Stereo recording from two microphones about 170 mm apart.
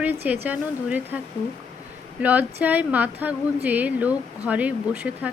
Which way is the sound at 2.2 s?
10° right (ahead or behind).